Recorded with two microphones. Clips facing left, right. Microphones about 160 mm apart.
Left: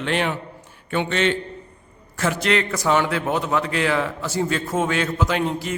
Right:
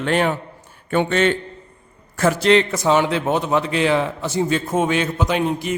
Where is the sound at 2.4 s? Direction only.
25° right (ahead or behind).